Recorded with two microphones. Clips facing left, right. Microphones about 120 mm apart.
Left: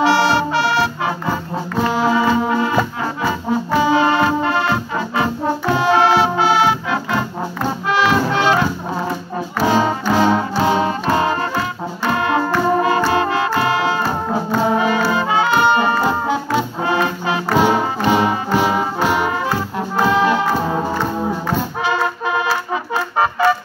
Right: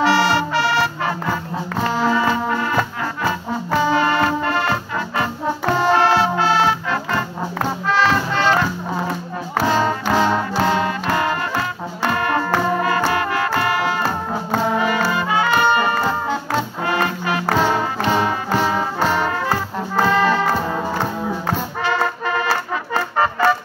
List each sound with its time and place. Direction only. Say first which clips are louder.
0.0 s music: left 2 dB; 20° left (ahead or behind)
3.8 s music: left 2 dB; 20° left (ahead or behind)
9.7 s music: left 2 dB; 10° left (ahead or behind)
10.7 s music: left 3 dB; 20° left (ahead or behind)
14.8 s brass instrument: left 2 dB; 20° left (ahead or behind)
16.8 s music: left 2 dB; 25° left (ahead or behind)
20.0 s trombone: left 1 dB; 10° left (ahead or behind)
21.8 s music: right 1 dB; 15° left (ahead or behind)